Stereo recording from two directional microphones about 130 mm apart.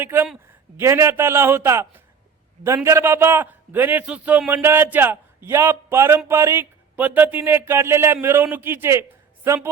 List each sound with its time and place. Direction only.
0.0 s a man's voice: 15° right (ahead or behind)